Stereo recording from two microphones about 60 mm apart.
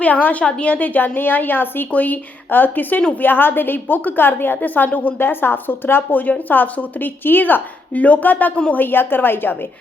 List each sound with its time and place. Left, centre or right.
0.0 s a woman's voice: left